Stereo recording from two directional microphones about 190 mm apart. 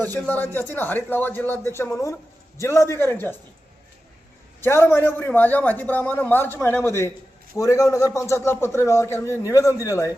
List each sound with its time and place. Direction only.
0.0 s a man's voice: 10° left (ahead or behind)
4.6 s a man's voice: 10° left (ahead or behind)